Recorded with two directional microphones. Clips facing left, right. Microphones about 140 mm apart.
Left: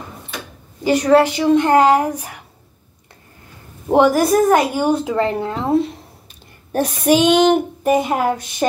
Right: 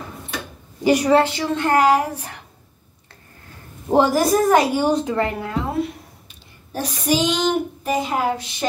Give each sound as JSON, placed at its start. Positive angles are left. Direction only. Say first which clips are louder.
{"t": 0.8, "sound": "a woman's voice", "louder": "even", "side_deg": -10}
{"t": 1.2, "sound": "speech", "louder": "left 7 dB", "side_deg": 15}
{"t": 3.9, "sound": "speech", "louder": "left 3 dB", "side_deg": 0}
{"t": 5.1, "sound": "speech", "louder": "left 3 dB", "side_deg": 25}
{"t": 6.7, "sound": "speech", "louder": "left 6 dB", "side_deg": 60}